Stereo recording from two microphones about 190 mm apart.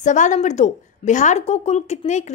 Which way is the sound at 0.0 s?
40° left (ahead or behind).